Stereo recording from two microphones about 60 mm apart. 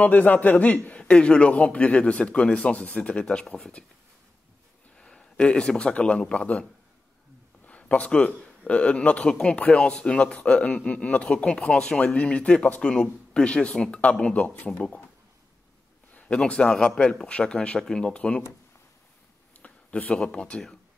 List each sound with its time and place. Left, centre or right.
0.0 s a man's voice: left
4.9 s a man's voice: centre
7.6 s a man's voice: left
16.1 s a sound: left
16.4 s speech: centre
19.6 s speech: centre